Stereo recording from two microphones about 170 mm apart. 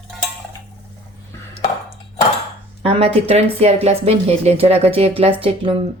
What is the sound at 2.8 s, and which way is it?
Speech, 35° right (ahead or behind).